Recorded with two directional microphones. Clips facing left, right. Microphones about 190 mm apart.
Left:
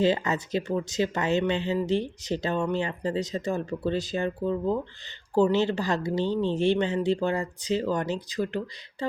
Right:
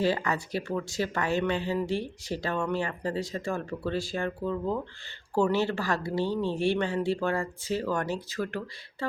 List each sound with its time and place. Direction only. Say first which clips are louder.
0.0 s speech: left 3 dB; 20° left (ahead or behind)